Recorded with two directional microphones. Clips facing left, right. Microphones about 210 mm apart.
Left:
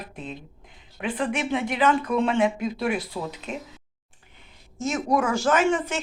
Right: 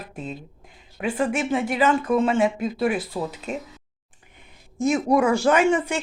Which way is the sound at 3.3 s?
45° right (ahead or behind).